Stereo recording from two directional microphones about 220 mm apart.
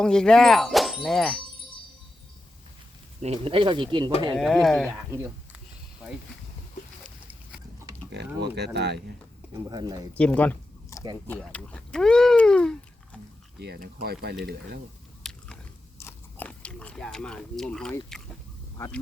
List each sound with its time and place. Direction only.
0.0 s speech: 5° left (ahead or behind)
3.2 s speech: 25° right (ahead or behind)
4.4 s speech: centre (ahead or behind)
8.1 s speech: 50° right (ahead or behind)
9.6 s speech: 15° right (ahead or behind)
10.2 s a sound: 5° left (ahead or behind)
11.3 s speech: 5° left (ahead or behind)
13.6 s speech: 45° right (ahead or behind)
15.2 s biting: centre (ahead or behind)
16.0 s speech: 10° left (ahead or behind)